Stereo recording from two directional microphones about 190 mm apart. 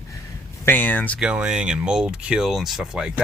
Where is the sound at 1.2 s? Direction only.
5° right (ahead or behind).